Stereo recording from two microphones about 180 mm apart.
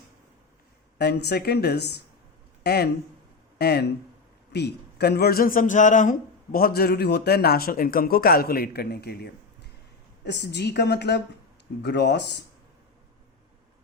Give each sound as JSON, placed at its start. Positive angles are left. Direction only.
{"t": 0.9, "sound": "a man's voice", "side_deg": 65}